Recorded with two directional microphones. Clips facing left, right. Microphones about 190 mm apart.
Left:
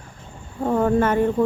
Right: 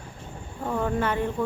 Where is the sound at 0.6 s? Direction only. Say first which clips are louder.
Left 7 dB; 45° left (ahead or behind).